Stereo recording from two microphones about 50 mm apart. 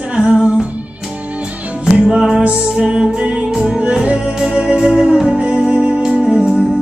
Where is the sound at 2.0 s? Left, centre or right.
Centre.